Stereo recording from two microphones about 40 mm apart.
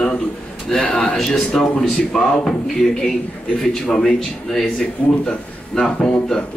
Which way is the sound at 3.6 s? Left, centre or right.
Centre.